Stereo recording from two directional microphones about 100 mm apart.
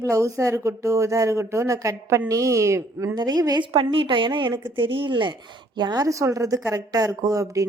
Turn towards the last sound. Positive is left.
turn(degrees=-35)  # may be behind; listen again after turning